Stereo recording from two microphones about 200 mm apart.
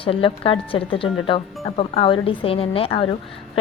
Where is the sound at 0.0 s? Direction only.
25° left (ahead or behind).